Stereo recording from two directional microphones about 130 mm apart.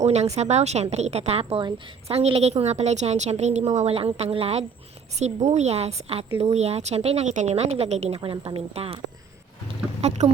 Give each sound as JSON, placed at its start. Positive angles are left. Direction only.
{"t": 0.0, "sound": "a woman's voice", "side_deg": -60}
{"t": 5.2, "sound": "a woman's voice", "side_deg": -60}
{"t": 8.2, "sound": "speech", "side_deg": -45}
{"t": 9.6, "sound": "a sound", "side_deg": -60}